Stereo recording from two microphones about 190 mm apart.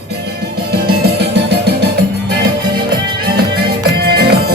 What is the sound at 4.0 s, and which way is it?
Music, 55° right (ahead or behind).